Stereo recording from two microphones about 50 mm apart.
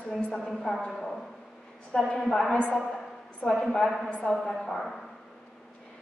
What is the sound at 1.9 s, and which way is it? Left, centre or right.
A woman's voice, centre.